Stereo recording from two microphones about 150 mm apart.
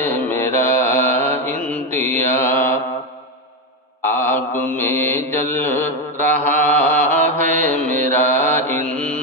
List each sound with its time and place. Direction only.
0.0 s mantra: 15° left (ahead or behind)
4.0 s mantra: 15° left (ahead or behind)